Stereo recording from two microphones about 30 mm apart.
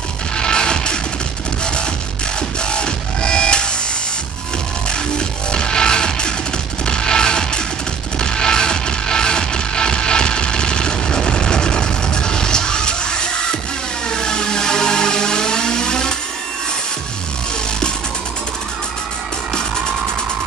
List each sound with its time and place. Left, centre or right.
0.4 s music: left
4.8 s music: left
14.0 s a sound: left